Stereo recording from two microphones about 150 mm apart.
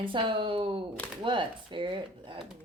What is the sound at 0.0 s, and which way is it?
Speech, 35° right (ahead or behind).